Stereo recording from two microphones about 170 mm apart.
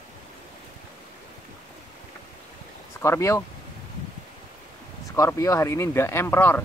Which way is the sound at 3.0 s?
15° left (ahead or behind).